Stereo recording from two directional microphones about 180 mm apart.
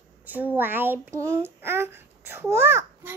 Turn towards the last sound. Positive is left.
turn(degrees=-15)  # may be behind; listen again after turning